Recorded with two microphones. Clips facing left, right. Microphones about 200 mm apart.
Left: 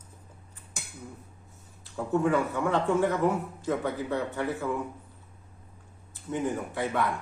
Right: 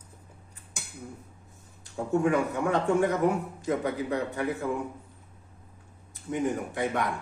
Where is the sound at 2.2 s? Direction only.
15° right (ahead or behind).